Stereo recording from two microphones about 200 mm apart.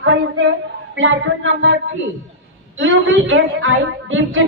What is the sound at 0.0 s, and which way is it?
A woman's voice, 70° right (ahead or behind).